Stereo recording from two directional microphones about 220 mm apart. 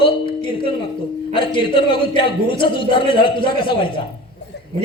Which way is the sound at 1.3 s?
20° left (ahead or behind).